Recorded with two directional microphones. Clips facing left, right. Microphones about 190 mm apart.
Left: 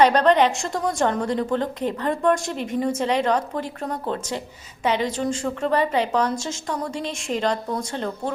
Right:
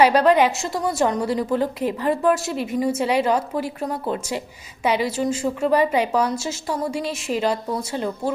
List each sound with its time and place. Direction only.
0.0 s a woman's voice: 10° right (ahead or behind)